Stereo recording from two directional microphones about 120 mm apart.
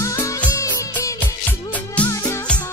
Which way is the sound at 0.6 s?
25° left (ahead or behind).